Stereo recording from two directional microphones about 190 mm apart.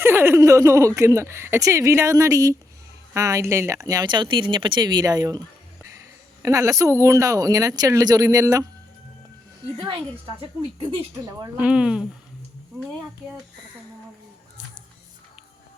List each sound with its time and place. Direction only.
0.0 s speech: 10° right (ahead or behind)
6.4 s speech: 15° right (ahead or behind)
10.8 s speech: 25° right (ahead or behind)
11.5 s speech: 5° right (ahead or behind)